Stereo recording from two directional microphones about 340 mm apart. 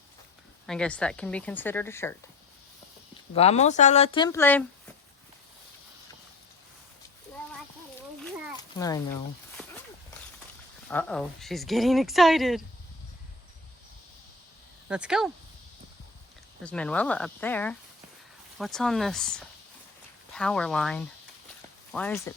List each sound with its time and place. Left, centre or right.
0.7 s speech: centre
3.3 s speech: centre
8.8 s speech: centre
10.8 s speech: centre
14.8 s speech: centre
16.6 s speech: centre